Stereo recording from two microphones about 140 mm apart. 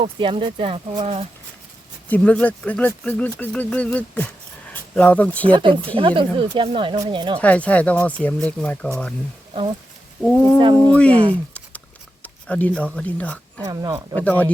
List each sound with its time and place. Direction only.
0.0 s speech: 40° right (ahead or behind)
2.0 s speech: 10° left (ahead or behind)
5.5 s speech: 40° right (ahead or behind)
7.3 s speech: 10° left (ahead or behind)
10.2 s speech: 5° left (ahead or behind)
11.1 s speech: 40° right (ahead or behind)
12.2 s speech: 10° left (ahead or behind)
13.6 s speech: 25° right (ahead or behind)
14.2 s speech: 10° left (ahead or behind)